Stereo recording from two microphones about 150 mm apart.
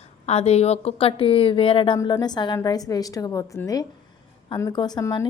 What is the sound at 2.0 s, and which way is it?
A woman's voice, 25° left (ahead or behind).